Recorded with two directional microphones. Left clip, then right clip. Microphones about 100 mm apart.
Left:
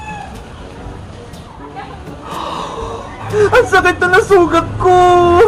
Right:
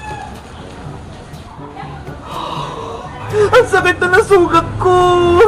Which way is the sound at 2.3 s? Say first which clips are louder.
Left 1 dB; centre (ahead or behind).